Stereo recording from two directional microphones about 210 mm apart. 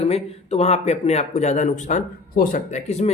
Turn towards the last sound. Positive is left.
turn(degrees=35)  # may be behind; listen again after turning